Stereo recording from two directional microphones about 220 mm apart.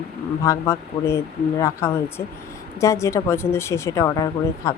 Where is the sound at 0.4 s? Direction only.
15° left (ahead or behind).